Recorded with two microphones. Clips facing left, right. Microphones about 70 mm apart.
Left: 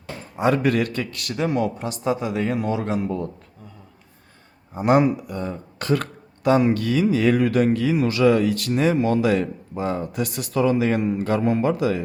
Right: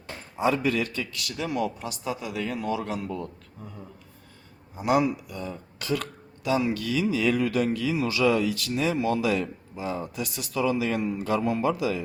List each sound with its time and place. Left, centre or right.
0.3 s speech: left
4.7 s speech: left